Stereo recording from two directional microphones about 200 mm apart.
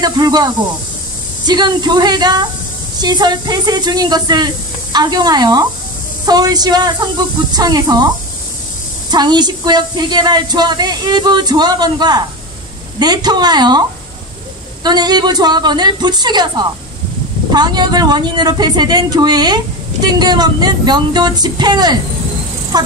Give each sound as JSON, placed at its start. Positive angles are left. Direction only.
{"t": 0.0, "sound": "speech", "side_deg": -20}
{"t": 9.1, "sound": "speech", "side_deg": -20}